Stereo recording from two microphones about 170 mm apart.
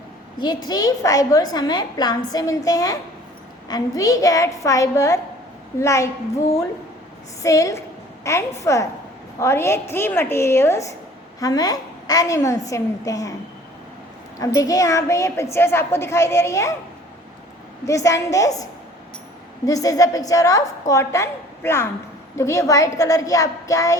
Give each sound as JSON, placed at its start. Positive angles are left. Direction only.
{"t": 0.3, "sound": "a woman's voice", "side_deg": 25}
{"t": 7.4, "sound": "a woman's voice", "side_deg": 20}
{"t": 14.3, "sound": "a woman's voice", "side_deg": 20}
{"t": 17.8, "sound": "a woman's voice", "side_deg": 20}